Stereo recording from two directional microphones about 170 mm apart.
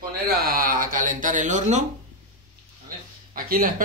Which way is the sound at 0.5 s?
60° right (ahead or behind).